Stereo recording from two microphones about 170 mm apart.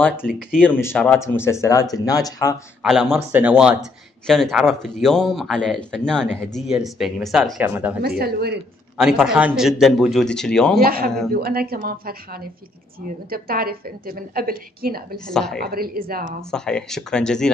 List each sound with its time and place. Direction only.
0.0 s speech: 10° left (ahead or behind)
2.8 s speech: 5° right (ahead or behind)
7.6 s a woman's voice: 10° right (ahead or behind)
8.0 s speech: 65° right (ahead or behind)
8.9 s speech: centre (ahead or behind)
10.8 s a woman's voice: 60° right (ahead or behind)
11.1 s speech: centre (ahead or behind)
11.3 s a woman's voice: 65° right (ahead or behind)
15.3 s speech: 5° left (ahead or behind)
15.6 s a woman's voice: 60° right (ahead or behind)
16.4 s speech: 5° left (ahead or behind)